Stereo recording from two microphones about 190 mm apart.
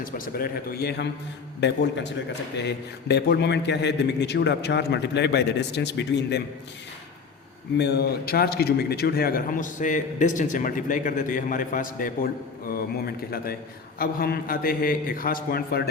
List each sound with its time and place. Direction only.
0.0 s a man's voice: 50° left (ahead or behind)
7.8 s a man's voice: 60° left (ahead or behind)